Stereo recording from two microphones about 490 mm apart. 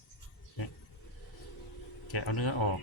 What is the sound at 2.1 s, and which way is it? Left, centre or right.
Speech, left.